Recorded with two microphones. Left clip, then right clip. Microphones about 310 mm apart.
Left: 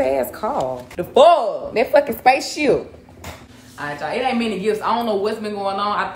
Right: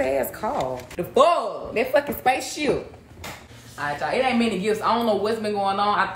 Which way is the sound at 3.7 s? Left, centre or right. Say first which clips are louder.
Even; centre.